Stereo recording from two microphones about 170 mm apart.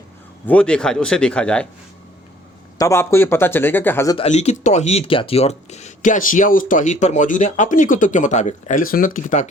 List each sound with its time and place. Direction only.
0.4 s speech: 5° left (ahead or behind)
2.7 s speech: 15° left (ahead or behind)
4.2 s speech: 40° left (ahead or behind)